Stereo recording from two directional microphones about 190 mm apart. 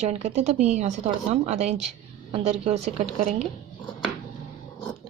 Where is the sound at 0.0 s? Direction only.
35° right (ahead or behind).